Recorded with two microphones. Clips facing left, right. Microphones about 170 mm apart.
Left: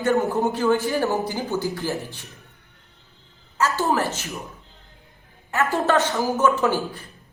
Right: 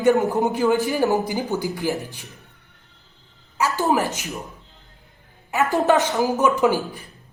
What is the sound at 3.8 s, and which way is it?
Speech, 15° right (ahead or behind).